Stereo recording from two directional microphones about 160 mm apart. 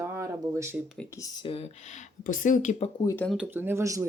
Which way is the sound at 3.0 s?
10° left (ahead or behind).